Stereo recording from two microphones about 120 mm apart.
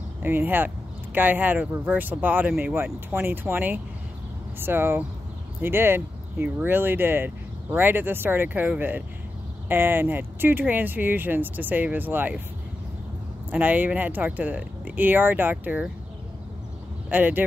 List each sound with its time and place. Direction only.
0.2 s speech: 15° right (ahead or behind)
13.5 s speech: 15° right (ahead or behind)
17.1 s speech: 15° right (ahead or behind)